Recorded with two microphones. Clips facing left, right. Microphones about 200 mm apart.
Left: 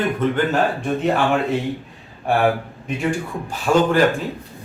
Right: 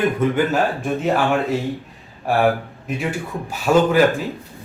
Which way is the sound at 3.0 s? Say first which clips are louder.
Left 3 dB; 5° right (ahead or behind).